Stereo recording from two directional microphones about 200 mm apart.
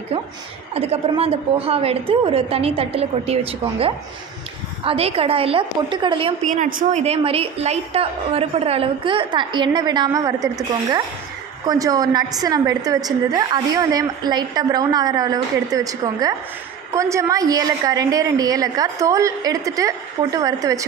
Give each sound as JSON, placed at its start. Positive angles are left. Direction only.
{"t": 0.7, "sound": "a woman's voice", "side_deg": -30}
{"t": 4.8, "sound": "a woman's voice", "side_deg": -30}
{"t": 6.5, "sound": "a woman's voice", "side_deg": -40}